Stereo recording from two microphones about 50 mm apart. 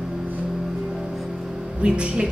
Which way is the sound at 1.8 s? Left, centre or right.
Right.